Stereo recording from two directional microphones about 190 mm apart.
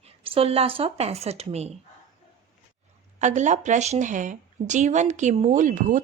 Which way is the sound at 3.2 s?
40° right (ahead or behind).